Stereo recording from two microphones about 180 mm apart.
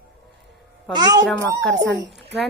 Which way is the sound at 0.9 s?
25° right (ahead or behind).